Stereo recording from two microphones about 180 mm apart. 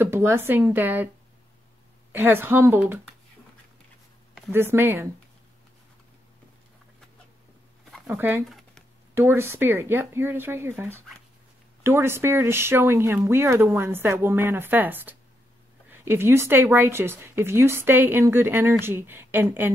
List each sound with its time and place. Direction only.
0.0 s speech: 15° right (ahead or behind)
2.1 s speech: 10° right (ahead or behind)
4.5 s speech: 15° right (ahead or behind)
8.1 s speech: 15° right (ahead or behind)
8.5 s a sound: centre (ahead or behind)
9.1 s speech: 15° right (ahead or behind)